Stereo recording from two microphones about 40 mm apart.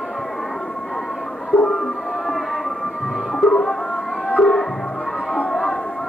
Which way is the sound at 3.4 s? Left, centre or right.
Centre.